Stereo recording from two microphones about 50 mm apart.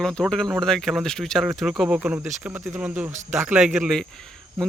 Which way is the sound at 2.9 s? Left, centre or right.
Right.